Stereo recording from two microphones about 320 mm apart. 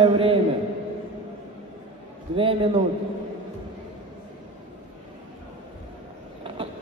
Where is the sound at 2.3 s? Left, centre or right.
Centre.